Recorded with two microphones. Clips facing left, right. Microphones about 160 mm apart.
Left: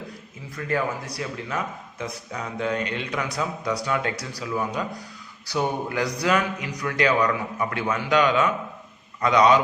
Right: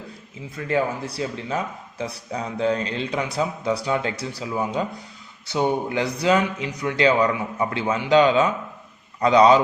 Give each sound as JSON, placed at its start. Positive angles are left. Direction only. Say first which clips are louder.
{"t": 0.5, "sound": "a man's voice", "louder": "right 3 dB", "side_deg": -25}